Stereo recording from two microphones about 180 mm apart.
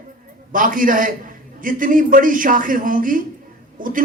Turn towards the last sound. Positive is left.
turn(degrees=-50)  # may be behind; listen again after turning